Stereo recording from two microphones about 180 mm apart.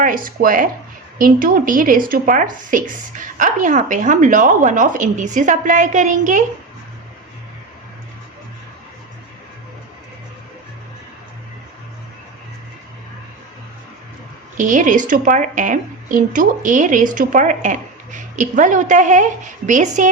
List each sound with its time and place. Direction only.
0.0 s a woman's voice: 50° right (ahead or behind)
14.6 s a woman's voice: 45° right (ahead or behind)